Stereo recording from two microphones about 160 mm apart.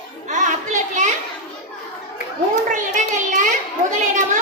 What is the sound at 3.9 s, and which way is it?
Chatter, 50° right (ahead or behind).